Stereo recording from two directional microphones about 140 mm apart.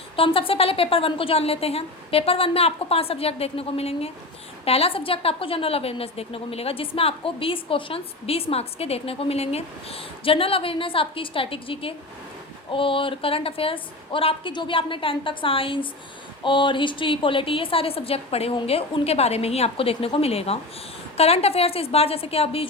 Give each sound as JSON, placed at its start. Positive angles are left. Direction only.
{"t": 0.2, "sound": "a woman's voice", "side_deg": 40}